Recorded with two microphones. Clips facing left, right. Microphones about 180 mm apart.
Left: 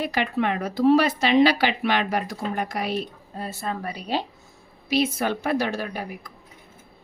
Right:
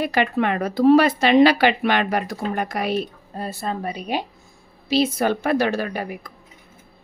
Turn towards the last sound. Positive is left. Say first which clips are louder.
# right 4 dB
turn(degrees=-70)  # may be behind; listen again after turning